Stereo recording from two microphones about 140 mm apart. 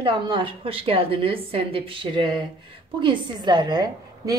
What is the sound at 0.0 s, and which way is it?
A woman's voice, 40° right (ahead or behind).